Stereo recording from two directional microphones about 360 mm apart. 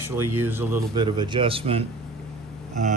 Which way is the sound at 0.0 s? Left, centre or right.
Centre.